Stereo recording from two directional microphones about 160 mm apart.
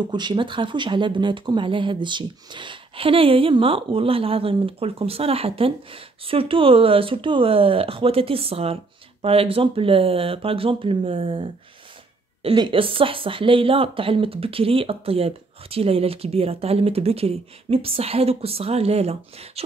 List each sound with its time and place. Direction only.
0.1 s speech: 30° right (ahead or behind)